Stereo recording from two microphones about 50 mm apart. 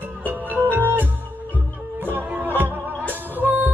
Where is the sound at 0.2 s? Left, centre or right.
Right.